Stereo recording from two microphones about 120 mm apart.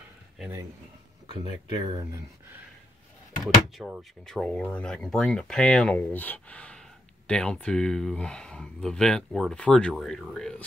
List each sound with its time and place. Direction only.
1.4 s speech: 40° right (ahead or behind)
3.4 s speech: 5° right (ahead or behind)
4.3 s speech: 5° left (ahead or behind)
5.9 s speech: 15° left (ahead or behind)